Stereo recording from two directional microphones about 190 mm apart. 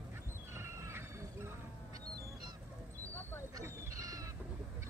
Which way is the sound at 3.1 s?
10° left (ahead or behind).